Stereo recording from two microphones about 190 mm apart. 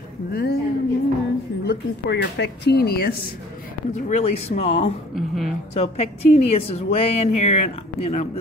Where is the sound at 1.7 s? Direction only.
60° left (ahead or behind).